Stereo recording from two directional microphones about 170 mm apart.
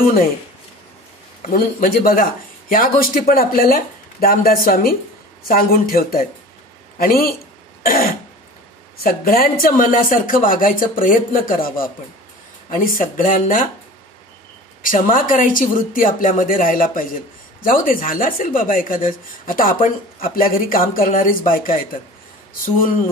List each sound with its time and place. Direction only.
1.4 s speech: 55° left (ahead or behind)
7.8 s cough: 60° left (ahead or behind)
9.0 s speech: 60° left (ahead or behind)
14.8 s speech: 55° left (ahead or behind)